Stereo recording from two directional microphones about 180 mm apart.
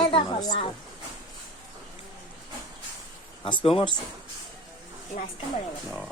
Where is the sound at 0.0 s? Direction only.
25° left (ahead or behind).